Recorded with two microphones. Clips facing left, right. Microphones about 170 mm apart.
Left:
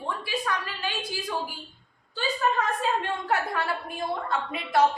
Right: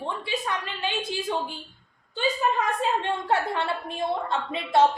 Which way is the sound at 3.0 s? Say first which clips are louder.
Right 2 dB; 25° right (ahead or behind).